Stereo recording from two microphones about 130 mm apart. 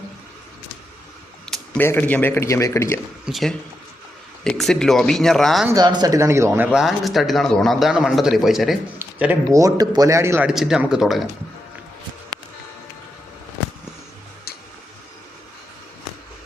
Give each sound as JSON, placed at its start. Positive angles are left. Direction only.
{"t": 1.5, "sound": "a sound", "side_deg": 5}
{"t": 1.8, "sound": "a man's voice", "side_deg": 15}
{"t": 3.2, "sound": "a man's voice", "side_deg": 0}
{"t": 5.7, "sound": "a man's voice", "side_deg": -35}
{"t": 6.7, "sound": "a man's voice", "side_deg": -5}
{"t": 9.0, "sound": "speech", "side_deg": -10}
{"t": 9.5, "sound": "a man's voice", "side_deg": -25}
{"t": 10.4, "sound": "a man's voice", "side_deg": -5}